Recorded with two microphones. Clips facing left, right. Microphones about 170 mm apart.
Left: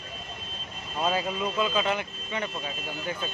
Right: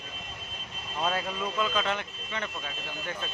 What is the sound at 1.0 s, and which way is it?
Speech, 5° left (ahead or behind).